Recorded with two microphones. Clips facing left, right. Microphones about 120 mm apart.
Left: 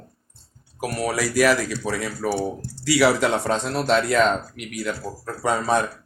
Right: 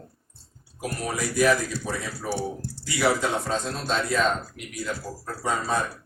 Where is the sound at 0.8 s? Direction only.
80° left.